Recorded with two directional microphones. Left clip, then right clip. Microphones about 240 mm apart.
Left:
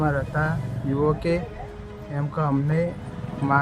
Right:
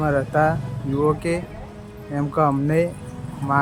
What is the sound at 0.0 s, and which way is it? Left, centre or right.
Music, right.